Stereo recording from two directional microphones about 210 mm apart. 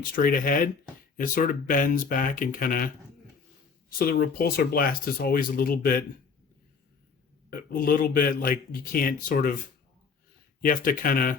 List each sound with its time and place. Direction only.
0.0 s speech: 40° left (ahead or behind)
7.5 s speech: 45° left (ahead or behind)
10.6 s speech: 40° left (ahead or behind)